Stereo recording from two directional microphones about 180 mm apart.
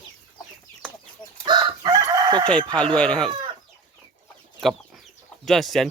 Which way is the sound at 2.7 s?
5° left (ahead or behind).